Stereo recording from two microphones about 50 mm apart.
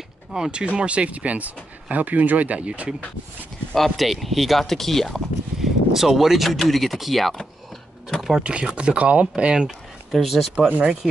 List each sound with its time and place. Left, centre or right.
0.3 s speech: centre
3.7 s speech: centre
8.4 s speech: centre
10.1 s speech: centre